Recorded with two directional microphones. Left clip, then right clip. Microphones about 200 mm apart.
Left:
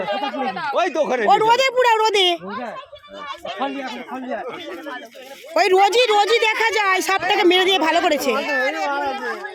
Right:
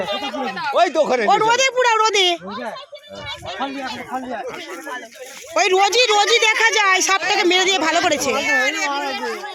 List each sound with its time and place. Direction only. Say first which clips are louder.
0.3 s speech: even; 25° right (ahead or behind)
0.7 s speech: right 4 dB; 35° right (ahead or behind)
1.3 s a woman's voice: left 4 dB; 15° left (ahead or behind)
5.5 s a woman's voice: even; 20° left (ahead or behind)
8.5 s speech: right 2 dB; 40° left (ahead or behind)